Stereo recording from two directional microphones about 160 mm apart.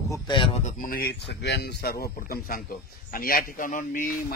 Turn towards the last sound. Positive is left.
turn(degrees=55)  # may be behind; listen again after turning